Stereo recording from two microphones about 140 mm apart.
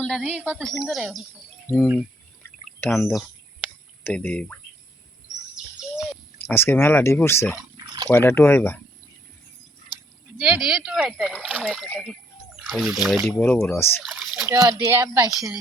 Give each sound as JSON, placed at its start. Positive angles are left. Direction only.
{"t": 0.0, "sound": "speech", "side_deg": 5}
{"t": 1.6, "sound": "speech", "side_deg": 10}
{"t": 2.9, "sound": "speech", "side_deg": 0}
{"t": 4.0, "sound": "speech", "side_deg": 15}
{"t": 6.5, "sound": "speech", "side_deg": 15}
{"t": 7.9, "sound": "a sound", "side_deg": -30}
{"t": 8.1, "sound": "speech", "side_deg": 20}
{"t": 10.3, "sound": "speech", "side_deg": -5}
{"t": 13.7, "sound": "speech", "side_deg": 15}
{"t": 14.0, "sound": "speech", "side_deg": -5}
{"t": 14.4, "sound": "a woman's voice", "side_deg": -20}